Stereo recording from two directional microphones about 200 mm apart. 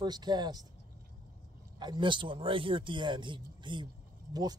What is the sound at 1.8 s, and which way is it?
Speech, 25° right (ahead or behind).